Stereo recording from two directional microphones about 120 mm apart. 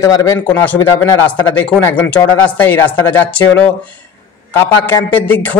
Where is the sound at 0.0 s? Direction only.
25° left (ahead or behind).